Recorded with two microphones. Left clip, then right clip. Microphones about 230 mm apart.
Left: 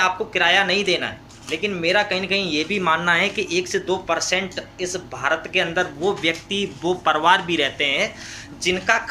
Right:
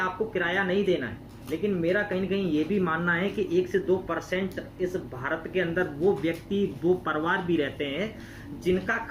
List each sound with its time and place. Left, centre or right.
0.0 s speech: left